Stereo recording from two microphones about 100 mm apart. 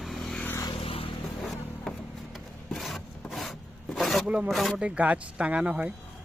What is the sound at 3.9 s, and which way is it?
Filing, 5° left (ahead or behind).